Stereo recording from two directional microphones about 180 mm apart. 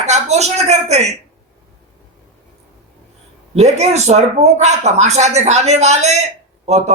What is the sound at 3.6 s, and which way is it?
A man's voice, 40° right (ahead or behind).